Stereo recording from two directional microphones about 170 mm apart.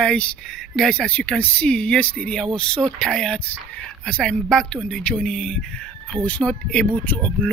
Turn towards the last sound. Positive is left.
turn(degrees=10)  # may be behind; listen again after turning